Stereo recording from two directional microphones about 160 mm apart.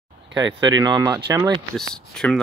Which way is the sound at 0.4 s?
25° right (ahead or behind).